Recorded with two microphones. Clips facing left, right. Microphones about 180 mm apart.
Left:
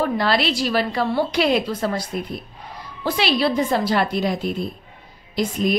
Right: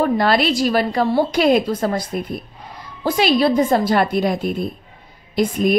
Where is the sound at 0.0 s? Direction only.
50° right (ahead or behind).